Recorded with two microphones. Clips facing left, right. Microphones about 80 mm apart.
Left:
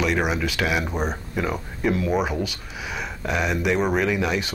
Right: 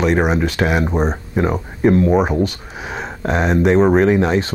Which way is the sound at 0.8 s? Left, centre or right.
Right.